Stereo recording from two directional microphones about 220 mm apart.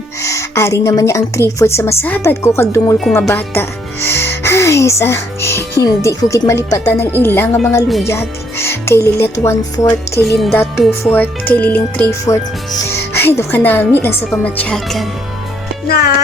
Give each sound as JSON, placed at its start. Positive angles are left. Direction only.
{"t": 0.2, "sound": "a woman's voice", "side_deg": 15}
{"t": 3.0, "sound": "a woman's voice", "side_deg": 0}
{"t": 10.3, "sound": "speech", "side_deg": 0}
{"t": 10.6, "sound": "a woman's voice", "side_deg": 10}
{"t": 15.9, "sound": "music", "side_deg": 45}